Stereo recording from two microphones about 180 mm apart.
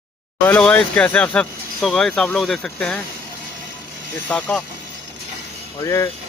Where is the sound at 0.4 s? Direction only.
10° left (ahead or behind).